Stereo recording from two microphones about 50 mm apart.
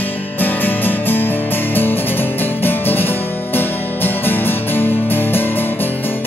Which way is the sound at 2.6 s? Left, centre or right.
Left.